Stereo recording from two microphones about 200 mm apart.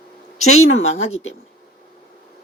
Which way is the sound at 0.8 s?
80° left.